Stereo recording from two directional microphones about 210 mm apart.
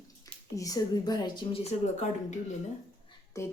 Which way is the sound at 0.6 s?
15° left (ahead or behind).